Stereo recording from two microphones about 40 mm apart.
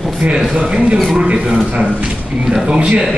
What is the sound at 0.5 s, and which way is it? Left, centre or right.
A man's voice, centre.